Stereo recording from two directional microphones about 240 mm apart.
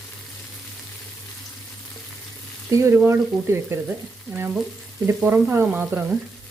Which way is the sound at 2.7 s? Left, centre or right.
Centre.